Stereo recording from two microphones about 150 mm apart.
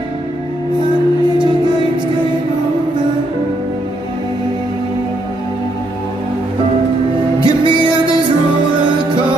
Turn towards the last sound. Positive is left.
turn(degrees=-30)  # may be behind; listen again after turning